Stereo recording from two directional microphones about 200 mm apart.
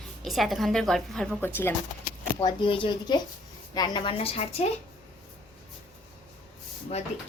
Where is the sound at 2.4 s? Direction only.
25° left (ahead or behind).